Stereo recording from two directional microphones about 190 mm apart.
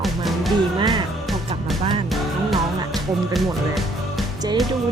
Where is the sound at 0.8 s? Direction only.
25° right (ahead or behind).